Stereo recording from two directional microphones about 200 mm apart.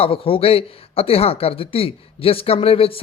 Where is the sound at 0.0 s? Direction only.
30° left (ahead or behind).